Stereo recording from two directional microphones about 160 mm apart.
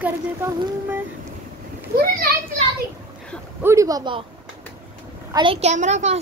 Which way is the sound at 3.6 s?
20° right (ahead or behind).